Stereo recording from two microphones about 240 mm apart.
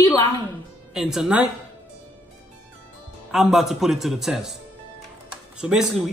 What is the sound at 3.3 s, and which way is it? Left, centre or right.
Speech, centre.